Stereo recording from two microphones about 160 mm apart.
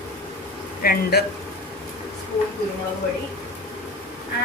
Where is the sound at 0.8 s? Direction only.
70° left (ahead or behind).